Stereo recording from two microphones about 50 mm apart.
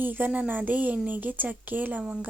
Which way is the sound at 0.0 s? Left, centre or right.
Right.